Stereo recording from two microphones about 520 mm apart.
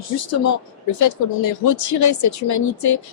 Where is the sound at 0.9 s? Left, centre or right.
Left.